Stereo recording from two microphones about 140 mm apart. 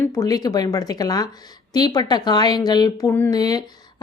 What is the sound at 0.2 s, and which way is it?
Speech, 25° left (ahead or behind).